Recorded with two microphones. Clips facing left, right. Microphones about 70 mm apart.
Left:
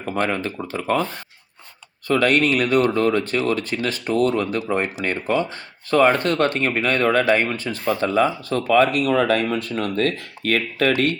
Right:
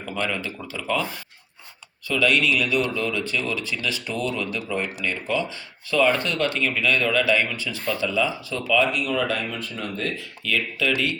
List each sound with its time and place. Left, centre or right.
0.0 s speech: left
2.0 s speech: left